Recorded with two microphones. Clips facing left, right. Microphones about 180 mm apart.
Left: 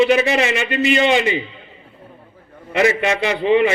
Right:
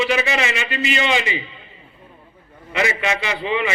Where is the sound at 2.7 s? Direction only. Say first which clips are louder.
Left 5 dB; 50° left (ahead or behind).